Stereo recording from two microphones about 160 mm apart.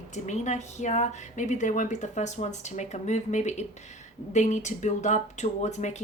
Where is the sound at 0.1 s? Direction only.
45° left (ahead or behind).